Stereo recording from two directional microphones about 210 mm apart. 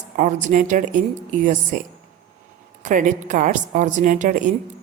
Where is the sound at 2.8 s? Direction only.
35° right (ahead or behind).